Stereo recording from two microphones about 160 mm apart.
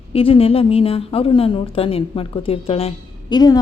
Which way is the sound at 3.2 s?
25° left (ahead or behind).